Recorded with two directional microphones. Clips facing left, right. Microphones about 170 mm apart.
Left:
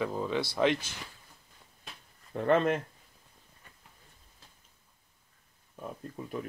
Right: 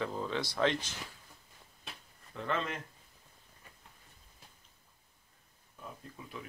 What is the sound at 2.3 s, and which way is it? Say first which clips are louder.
Speech: left 10 dB; 55° left (ahead or behind).